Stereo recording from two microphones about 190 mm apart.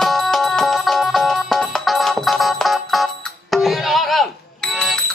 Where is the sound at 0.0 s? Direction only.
Centre (ahead or behind).